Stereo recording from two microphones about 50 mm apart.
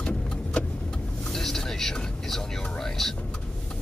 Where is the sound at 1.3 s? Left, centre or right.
Centre.